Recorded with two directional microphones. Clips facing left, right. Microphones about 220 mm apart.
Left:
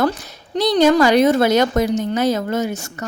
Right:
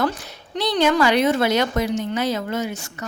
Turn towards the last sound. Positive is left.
turn(degrees=45)  # may be behind; listen again after turning